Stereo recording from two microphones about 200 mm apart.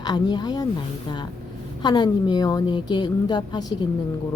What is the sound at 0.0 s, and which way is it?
Speech, 20° left (ahead or behind).